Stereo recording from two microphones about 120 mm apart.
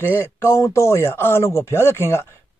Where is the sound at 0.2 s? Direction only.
20° left (ahead or behind).